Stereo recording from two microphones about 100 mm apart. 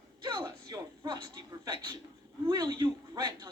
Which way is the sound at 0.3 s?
40° right (ahead or behind).